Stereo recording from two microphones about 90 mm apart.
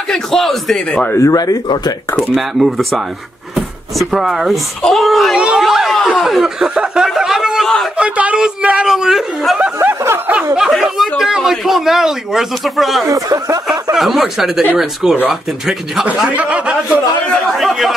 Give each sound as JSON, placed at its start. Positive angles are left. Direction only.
{"t": 0.1, "sound": "speech", "side_deg": 5}
{"t": 1.1, "sound": "speech", "side_deg": 40}
{"t": 2.1, "sound": "speech", "side_deg": 0}
{"t": 4.1, "sound": "speech", "side_deg": -5}
{"t": 9.8, "sound": "a sound", "side_deg": -25}
{"t": 10.7, "sound": "speech", "side_deg": 0}
{"t": 13.1, "sound": "speech", "side_deg": -40}
{"t": 13.9, "sound": "speech", "side_deg": 0}
{"t": 17.5, "sound": "speech", "side_deg": 0}